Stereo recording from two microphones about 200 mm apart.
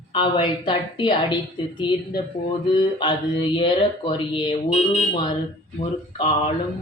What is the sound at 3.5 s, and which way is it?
Speech, 25° left (ahead or behind).